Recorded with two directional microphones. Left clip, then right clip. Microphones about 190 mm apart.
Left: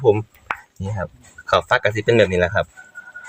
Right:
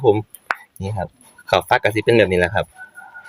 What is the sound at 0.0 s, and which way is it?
Speech, 15° right (ahead or behind).